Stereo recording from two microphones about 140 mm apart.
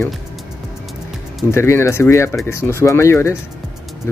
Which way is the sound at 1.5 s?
20° left (ahead or behind).